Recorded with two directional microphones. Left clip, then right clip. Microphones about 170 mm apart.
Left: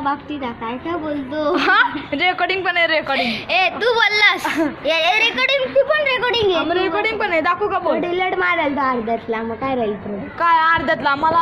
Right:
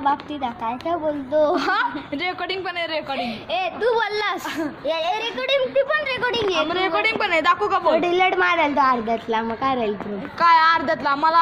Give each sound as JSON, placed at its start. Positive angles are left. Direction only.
{"t": 0.8, "sound": "a woman's voice", "side_deg": -40}
{"t": 1.5, "sound": "a woman's voice", "side_deg": -10}
{"t": 3.2, "sound": "a woman's voice", "side_deg": -45}
{"t": 4.8, "sound": "speech", "side_deg": -25}
{"t": 5.9, "sound": "speech", "side_deg": 25}
{"t": 6.6, "sound": "a woman's voice", "side_deg": -5}
{"t": 7.9, "sound": "a woman's voice", "side_deg": -50}
{"t": 10.4, "sound": "a woman's voice", "side_deg": 0}